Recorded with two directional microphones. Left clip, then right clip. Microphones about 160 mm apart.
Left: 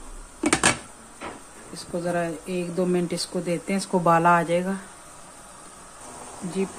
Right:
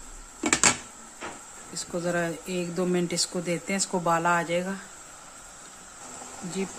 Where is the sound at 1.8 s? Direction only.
15° right (ahead or behind).